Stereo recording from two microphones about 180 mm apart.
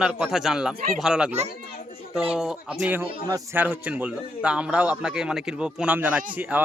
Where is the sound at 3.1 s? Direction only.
20° right (ahead or behind).